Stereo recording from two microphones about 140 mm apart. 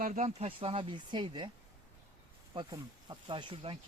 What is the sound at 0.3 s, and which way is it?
Speech, 45° right (ahead or behind).